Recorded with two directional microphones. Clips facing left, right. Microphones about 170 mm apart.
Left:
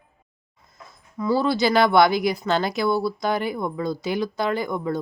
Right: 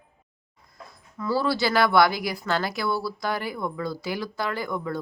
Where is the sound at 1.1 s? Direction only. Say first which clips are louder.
Left 4 dB; 15° left (ahead or behind).